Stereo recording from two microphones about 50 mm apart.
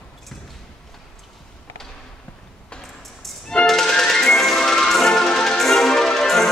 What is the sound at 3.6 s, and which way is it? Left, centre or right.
Music, centre.